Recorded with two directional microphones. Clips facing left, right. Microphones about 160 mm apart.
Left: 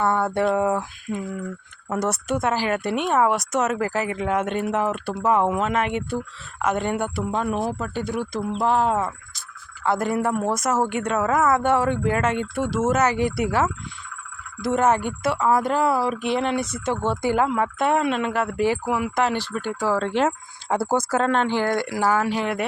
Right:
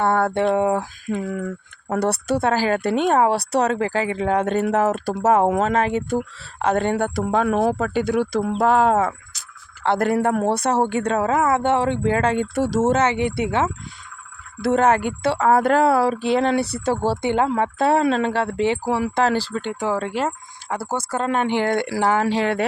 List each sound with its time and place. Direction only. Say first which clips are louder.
0.1 s a sound: right 3 dB; 60° right (ahead or behind)
0.3 s speech: right 2 dB; 25° right (ahead or behind)
7.5 s speech: right 6 dB; 55° right (ahead or behind)
7.8 s speech: right 6 dB; 90° right
8.4 s speech: right 4 dB; 50° right (ahead or behind)
8.6 s speech: right 4 dB; 90° right
10.4 s speech: right 3 dB; 30° right (ahead or behind)
15.6 s speech: right 5 dB; 70° right (ahead or behind)
16.0 s speech: right 4 dB; 30° right (ahead or behind); by 20.1 s 15° right (ahead or behind)
20.7 s a woman's voice: left 4 dB; 20° left (ahead or behind)
21.2 s speech: right 1 dB; 15° right (ahead or behind)